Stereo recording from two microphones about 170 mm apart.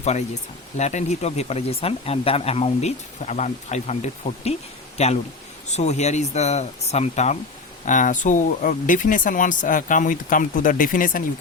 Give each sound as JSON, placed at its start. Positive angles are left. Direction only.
{"t": 0.8, "sound": "speech", "side_deg": 45}